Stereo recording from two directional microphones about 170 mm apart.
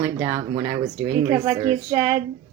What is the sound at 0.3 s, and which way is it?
A woman's voice, 40° right (ahead or behind).